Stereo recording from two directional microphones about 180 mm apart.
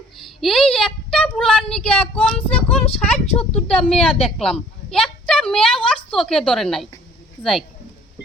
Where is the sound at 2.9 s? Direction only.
35° left (ahead or behind).